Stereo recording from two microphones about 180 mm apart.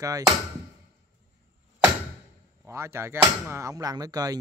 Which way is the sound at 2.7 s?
15° right (ahead or behind).